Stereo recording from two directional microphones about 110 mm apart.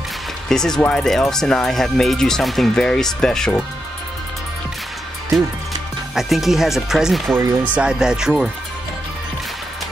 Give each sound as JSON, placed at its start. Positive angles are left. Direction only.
{"t": 0.5, "sound": "speech", "side_deg": 5}
{"t": 6.1, "sound": "speech", "side_deg": 0}